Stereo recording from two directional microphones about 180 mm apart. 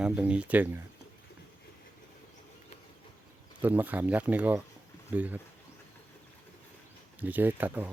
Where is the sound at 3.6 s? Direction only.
10° right (ahead or behind).